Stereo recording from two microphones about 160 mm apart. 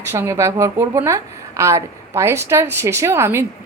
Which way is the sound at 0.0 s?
15° right (ahead or behind).